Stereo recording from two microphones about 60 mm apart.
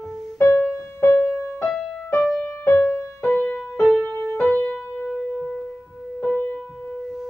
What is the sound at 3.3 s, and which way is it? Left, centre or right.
Music, left.